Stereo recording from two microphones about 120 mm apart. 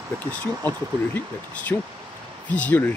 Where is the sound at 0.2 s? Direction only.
15° left (ahead or behind).